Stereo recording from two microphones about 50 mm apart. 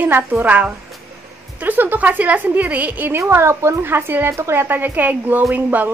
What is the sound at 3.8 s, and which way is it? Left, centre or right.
A woman's voice, right.